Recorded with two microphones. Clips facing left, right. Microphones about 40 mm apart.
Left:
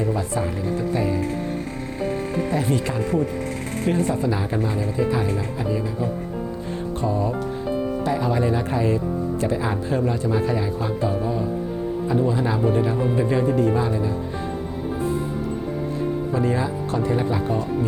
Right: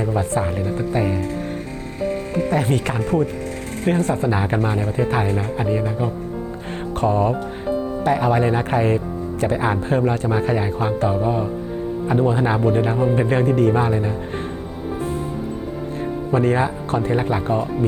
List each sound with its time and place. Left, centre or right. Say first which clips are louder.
0.0 s speech: right 3 dB; right
2.5 s speech: right 4 dB; right
4.1 s speech: right 3 dB; right
16.3 s speech: right 8 dB; right